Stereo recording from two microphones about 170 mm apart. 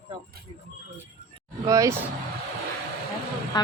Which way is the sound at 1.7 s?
20° right (ahead or behind).